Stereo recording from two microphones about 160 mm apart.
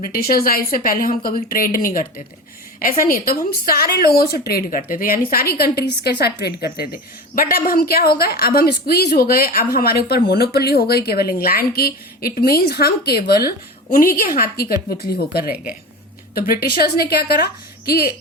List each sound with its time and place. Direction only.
0.0 s a woman's voice: 70° left (ahead or behind)
3.1 s a woman's voice: 70° left (ahead or behind); by 6.7 s 90° left
6.7 s a woman's voice: 70° left (ahead or behind)